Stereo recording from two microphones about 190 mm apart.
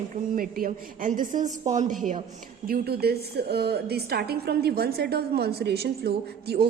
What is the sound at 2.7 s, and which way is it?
A woman's voice, 55° right (ahead or behind).